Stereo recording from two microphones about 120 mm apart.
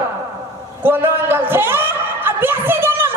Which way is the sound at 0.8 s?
20° right (ahead or behind).